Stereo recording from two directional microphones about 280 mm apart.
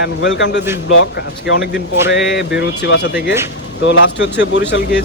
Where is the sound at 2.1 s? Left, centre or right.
Left.